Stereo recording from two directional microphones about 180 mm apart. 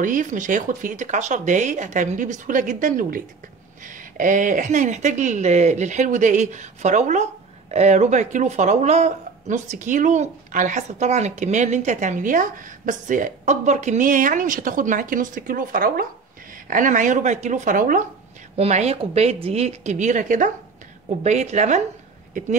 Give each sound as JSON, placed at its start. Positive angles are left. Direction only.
{"t": 0.0, "sound": "a woman's voice", "side_deg": -45}